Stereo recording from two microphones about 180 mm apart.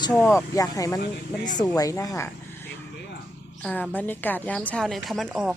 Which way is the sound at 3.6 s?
5° left (ahead or behind).